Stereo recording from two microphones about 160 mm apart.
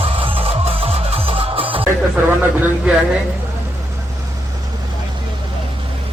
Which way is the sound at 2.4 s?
10° right (ahead or behind).